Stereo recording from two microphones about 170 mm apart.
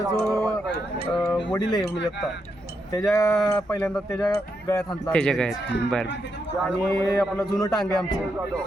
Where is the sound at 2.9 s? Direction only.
20° left (ahead or behind).